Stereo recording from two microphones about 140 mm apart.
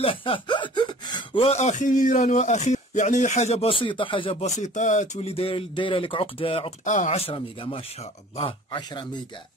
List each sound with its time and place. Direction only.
0.0 s speech: 40° left (ahead or behind)
4.5 s speech: 60° left (ahead or behind); by 6.7 s 40° left (ahead or behind)
6.8 s speech: 60° left (ahead or behind)
7.2 s speech: 40° left (ahead or behind)